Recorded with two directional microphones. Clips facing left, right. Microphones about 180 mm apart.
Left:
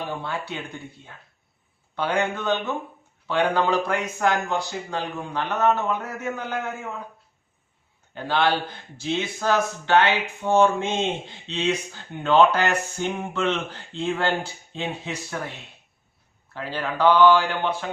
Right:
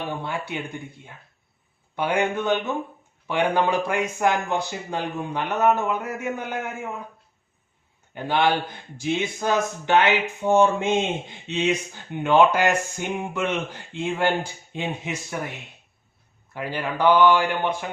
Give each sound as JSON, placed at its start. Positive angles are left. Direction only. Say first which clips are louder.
{"t": 0.2, "sound": "speech", "louder": "right 1 dB", "side_deg": -15}
{"t": 8.1, "sound": "speech", "louder": "right 1 dB", "side_deg": -15}